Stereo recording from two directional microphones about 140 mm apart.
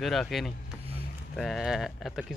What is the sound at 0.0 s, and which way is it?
Speech, centre (ahead or behind).